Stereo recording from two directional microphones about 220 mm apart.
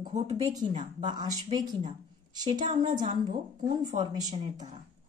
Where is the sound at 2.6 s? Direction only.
35° right (ahead or behind).